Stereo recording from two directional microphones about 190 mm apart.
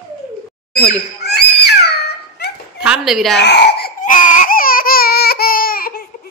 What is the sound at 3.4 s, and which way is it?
Baby cry, 60° left (ahead or behind).